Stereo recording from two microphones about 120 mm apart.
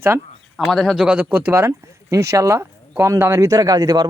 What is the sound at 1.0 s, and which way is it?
Speech, 15° right (ahead or behind).